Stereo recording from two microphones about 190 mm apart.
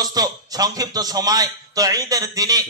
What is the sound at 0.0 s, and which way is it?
A man's voice, 20° right (ahead or behind).